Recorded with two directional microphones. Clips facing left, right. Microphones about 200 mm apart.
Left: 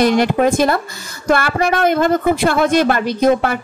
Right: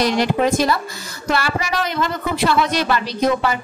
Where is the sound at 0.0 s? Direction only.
50° left (ahead or behind).